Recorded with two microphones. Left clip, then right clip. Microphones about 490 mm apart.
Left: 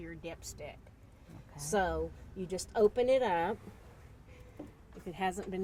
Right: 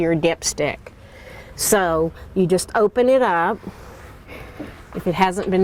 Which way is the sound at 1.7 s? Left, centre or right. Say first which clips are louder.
Right 15 dB; right.